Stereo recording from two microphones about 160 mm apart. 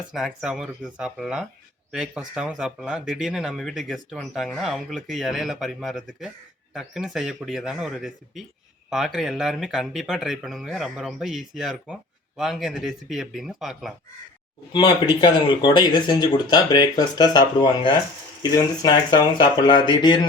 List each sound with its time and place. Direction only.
0.1 s speech: centre (ahead or behind)
14.7 s speech: 30° left (ahead or behind)